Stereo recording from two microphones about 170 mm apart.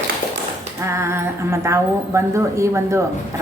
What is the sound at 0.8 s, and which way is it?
A woman's voice, 15° right (ahead or behind).